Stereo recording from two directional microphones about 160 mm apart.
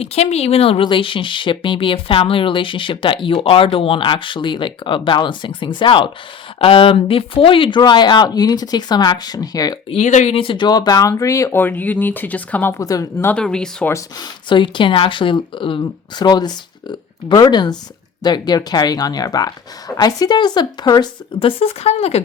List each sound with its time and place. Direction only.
0.0 s speech: 40° left (ahead or behind); by 9.7 s 25° left (ahead or behind)
9.9 s speech: 45° left (ahead or behind)
10.3 s speech: 35° left (ahead or behind); by 13.9 s 5° left (ahead or behind)
13.9 s speech: 30° left (ahead or behind)